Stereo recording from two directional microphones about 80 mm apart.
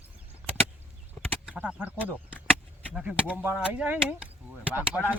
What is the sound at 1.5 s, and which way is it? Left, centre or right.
Speech, centre.